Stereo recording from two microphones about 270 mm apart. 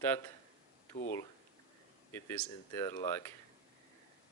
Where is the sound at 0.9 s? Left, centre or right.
Left.